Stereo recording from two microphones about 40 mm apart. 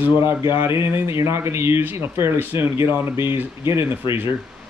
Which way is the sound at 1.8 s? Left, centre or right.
Right.